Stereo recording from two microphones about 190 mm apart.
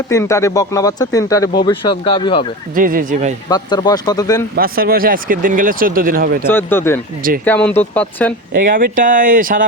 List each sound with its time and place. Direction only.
0.1 s speech: 15° left (ahead or behind)
2.7 s speech: 45° right (ahead or behind)
3.5 s speech: 20° left (ahead or behind)
4.5 s speech: 50° right (ahead or behind)
6.5 s speech: 10° left (ahead or behind)
8.7 s speech: 45° right (ahead or behind)